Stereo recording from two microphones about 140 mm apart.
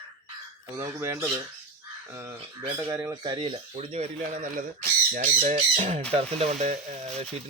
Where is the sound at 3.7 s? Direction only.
55° right (ahead or behind).